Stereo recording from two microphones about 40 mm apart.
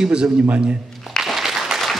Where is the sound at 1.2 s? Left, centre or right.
Centre.